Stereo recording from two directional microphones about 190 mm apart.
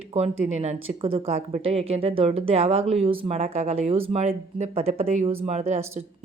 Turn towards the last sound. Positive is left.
turn(degrees=-35)  # may be behind; listen again after turning